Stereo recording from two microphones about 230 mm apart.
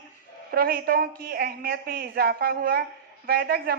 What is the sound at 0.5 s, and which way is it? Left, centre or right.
A woman's voice, right.